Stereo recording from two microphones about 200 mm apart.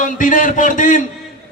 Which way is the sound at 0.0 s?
40° left (ahead or behind).